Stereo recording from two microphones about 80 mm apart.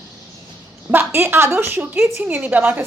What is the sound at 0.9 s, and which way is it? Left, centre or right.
A woman's voice, right.